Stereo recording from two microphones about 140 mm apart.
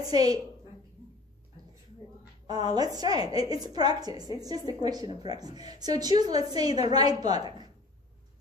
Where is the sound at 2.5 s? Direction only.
30° right (ahead or behind).